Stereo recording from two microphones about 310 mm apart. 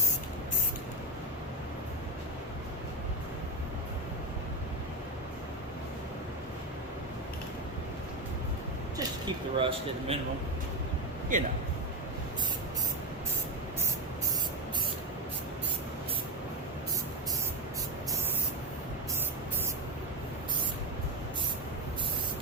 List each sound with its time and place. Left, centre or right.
9.6 s speech: centre
11.3 s a man's voice: right